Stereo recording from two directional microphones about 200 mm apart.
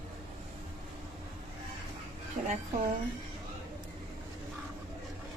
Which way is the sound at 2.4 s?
35° right (ahead or behind).